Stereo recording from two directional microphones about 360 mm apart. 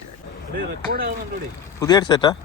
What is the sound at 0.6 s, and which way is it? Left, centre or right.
Speech, right.